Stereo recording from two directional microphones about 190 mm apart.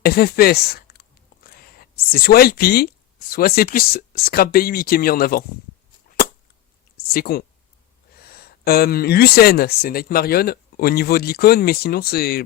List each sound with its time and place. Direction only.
0.0 s speech: 55° left (ahead or behind)
6.9 s speech: 55° left (ahead or behind)